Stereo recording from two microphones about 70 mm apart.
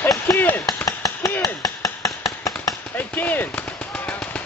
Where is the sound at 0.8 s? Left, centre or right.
Left.